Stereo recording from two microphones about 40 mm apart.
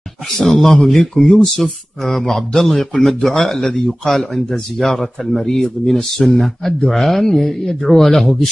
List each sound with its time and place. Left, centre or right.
0.3 s a man's voice: centre
1.1 s speech: centre
1.4 s a man's voice: centre